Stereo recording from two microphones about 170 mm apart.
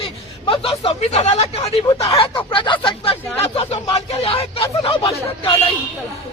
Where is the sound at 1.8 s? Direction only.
20° left (ahead or behind).